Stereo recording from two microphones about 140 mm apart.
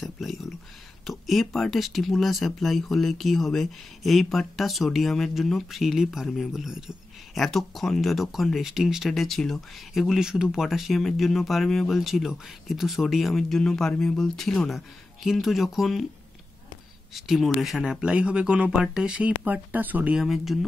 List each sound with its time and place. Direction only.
0.0 s speech: centre (ahead or behind)
17.1 s speech: centre (ahead or behind)